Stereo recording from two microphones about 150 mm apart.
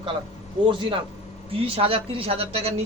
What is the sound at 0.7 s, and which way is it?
A man's voice, 35° right (ahead or behind).